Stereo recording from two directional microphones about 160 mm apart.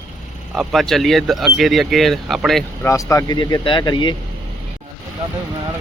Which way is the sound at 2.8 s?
20° left (ahead or behind).